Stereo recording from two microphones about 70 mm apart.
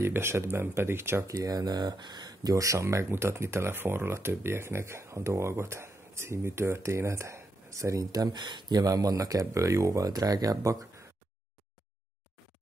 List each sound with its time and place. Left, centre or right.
0.0 s speech: right
1.3 s speech: right